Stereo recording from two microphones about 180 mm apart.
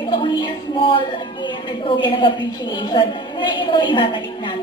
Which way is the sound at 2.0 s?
25° left (ahead or behind).